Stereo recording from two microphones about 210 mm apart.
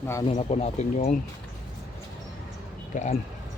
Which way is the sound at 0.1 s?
15° left (ahead or behind).